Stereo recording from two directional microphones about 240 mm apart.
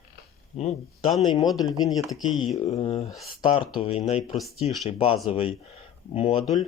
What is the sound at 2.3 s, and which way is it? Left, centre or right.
Speech, centre.